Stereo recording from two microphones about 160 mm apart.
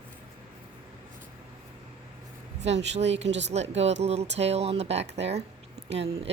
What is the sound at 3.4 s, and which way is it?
Speech, 45° right (ahead or behind).